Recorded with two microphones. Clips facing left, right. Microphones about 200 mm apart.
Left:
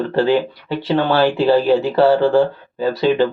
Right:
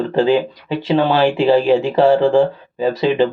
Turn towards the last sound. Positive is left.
turn(degrees=-20)  # may be behind; listen again after turning